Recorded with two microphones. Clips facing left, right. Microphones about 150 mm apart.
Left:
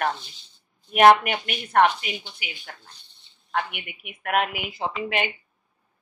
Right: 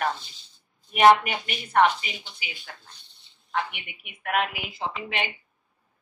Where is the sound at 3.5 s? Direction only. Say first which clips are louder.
Left 1 dB; 60° left (ahead or behind).